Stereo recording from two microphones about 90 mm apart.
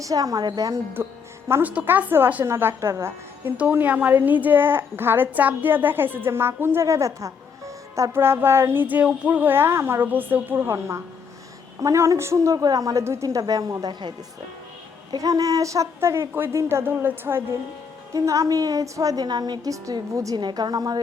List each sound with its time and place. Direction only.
0.0 s speech: 40° right (ahead or behind)
1.0 s a woman's voice: 30° right (ahead or behind)
3.6 s a woman's voice: 20° right (ahead or behind); by 13.9 s 45° right (ahead or behind)
15.1 s speech: 40° right (ahead or behind); by 17.4 s 25° right (ahead or behind)
18.1 s a woman's voice: 40° right (ahead or behind)
20.3 s a woman's voice: 50° right (ahead or behind)